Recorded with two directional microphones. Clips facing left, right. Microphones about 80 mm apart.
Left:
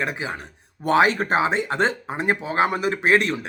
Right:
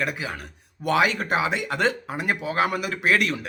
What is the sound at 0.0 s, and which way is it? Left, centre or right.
Speech, left.